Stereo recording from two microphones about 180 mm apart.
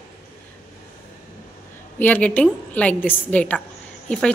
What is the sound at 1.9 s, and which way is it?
A woman's voice, 10° left (ahead or behind).